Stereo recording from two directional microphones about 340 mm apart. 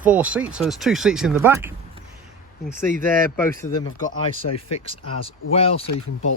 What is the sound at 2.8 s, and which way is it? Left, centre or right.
Speech, right.